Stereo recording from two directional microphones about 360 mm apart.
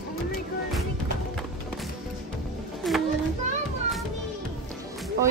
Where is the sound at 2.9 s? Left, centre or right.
Centre.